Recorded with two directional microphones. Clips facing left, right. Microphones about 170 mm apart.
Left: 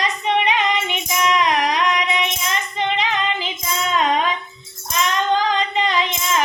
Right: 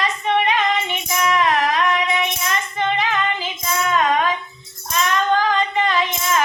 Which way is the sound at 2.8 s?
20° left (ahead or behind).